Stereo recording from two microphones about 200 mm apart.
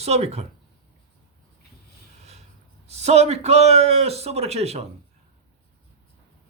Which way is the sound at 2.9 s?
35° right (ahead or behind).